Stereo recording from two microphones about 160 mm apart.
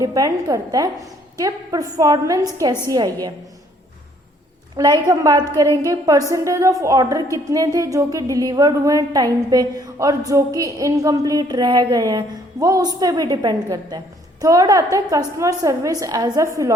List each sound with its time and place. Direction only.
0.0 s a woman's voice: 20° right (ahead or behind)
4.8 s a woman's voice: 25° right (ahead or behind)